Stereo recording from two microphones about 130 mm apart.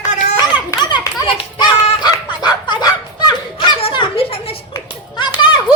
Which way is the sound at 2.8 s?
35° left (ahead or behind).